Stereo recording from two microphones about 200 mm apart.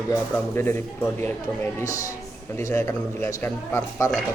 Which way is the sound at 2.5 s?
10° left (ahead or behind).